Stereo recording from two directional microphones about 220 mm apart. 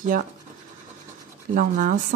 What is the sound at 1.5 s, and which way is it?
Speech, 40° right (ahead or behind).